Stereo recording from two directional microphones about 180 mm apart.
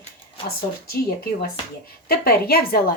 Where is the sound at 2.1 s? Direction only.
60° left (ahead or behind).